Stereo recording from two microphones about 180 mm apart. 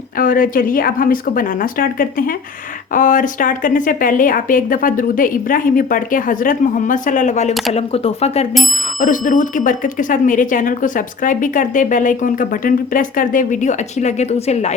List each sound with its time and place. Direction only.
0.2 s speech: 50° left (ahead or behind); by 8.4 s 35° left (ahead or behind)
9.0 s speech: 45° left (ahead or behind)